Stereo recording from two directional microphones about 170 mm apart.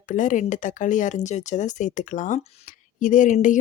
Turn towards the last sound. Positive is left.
turn(degrees=50)  # may be behind; listen again after turning